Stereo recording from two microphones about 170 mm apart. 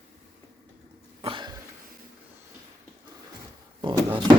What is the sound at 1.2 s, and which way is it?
Cough, 30° right (ahead or behind).